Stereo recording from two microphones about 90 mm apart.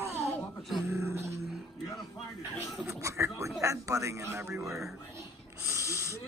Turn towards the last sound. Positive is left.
turn(degrees=-35)  # may be behind; listen again after turning